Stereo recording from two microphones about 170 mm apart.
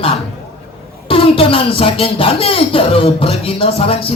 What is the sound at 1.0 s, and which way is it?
Speech, 35° left (ahead or behind).